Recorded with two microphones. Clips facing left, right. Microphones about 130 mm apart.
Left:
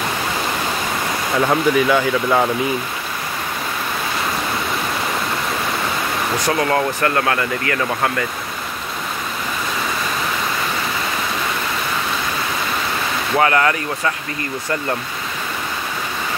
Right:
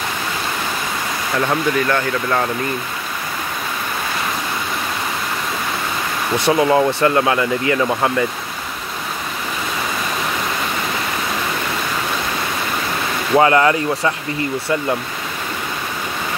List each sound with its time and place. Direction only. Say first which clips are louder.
1.3 s speech: left 2 dB; 5° left (ahead or behind)
6.3 s speech: right 5 dB; 20° right (ahead or behind)
13.4 s speech: right 3 dB; 25° right (ahead or behind)